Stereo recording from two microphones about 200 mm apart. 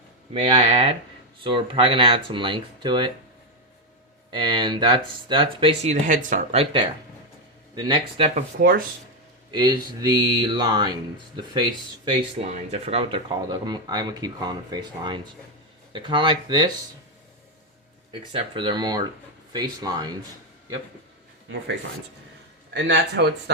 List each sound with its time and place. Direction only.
0.3 s speech: 30° right (ahead or behind)
4.3 s speech: 20° right (ahead or behind)
8.4 s speech: 45° right (ahead or behind)
9.5 s speech: 20° right (ahead or behind)
12.5 s speech: 30° right (ahead or behind)
18.1 s speech: 25° right (ahead or behind)
22.7 s speech: 60° right (ahead or behind)